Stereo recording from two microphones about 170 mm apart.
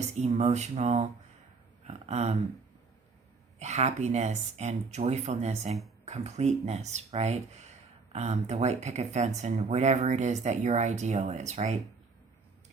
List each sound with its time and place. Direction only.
0.0 s speech: 40° right (ahead or behind)
3.6 s speech: 40° right (ahead or behind)